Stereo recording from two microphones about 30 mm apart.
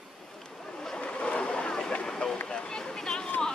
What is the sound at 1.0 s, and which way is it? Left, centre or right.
Boat, left.